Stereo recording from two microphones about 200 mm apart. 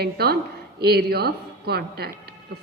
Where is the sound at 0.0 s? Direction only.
55° right (ahead or behind).